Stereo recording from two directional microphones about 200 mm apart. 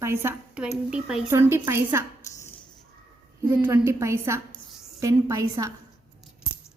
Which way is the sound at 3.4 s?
10° right (ahead or behind).